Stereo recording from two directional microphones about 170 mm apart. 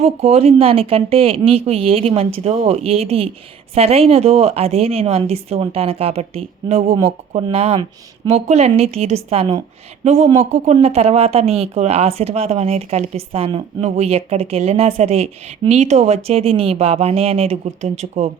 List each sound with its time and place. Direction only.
0.0 s speech: 35° right (ahead or behind)